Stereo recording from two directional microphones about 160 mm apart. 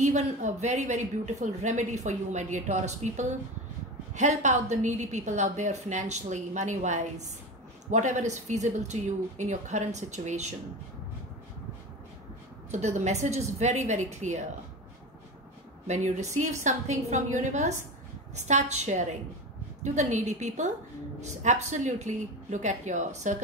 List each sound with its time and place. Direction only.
0.0 s a woman's voice: 50° right (ahead or behind)
12.7 s a woman's voice: 45° right (ahead or behind)
15.9 s a woman's voice: 45° right (ahead or behind)